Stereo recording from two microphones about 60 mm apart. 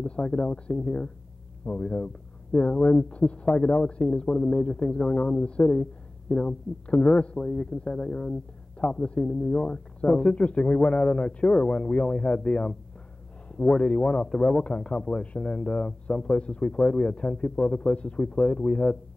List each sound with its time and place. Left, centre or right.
0.0 s speech: centre